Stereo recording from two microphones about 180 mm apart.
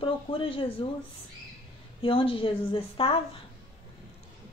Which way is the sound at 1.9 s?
30° left (ahead or behind).